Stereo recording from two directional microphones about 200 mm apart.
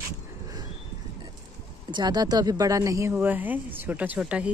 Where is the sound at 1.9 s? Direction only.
20° right (ahead or behind).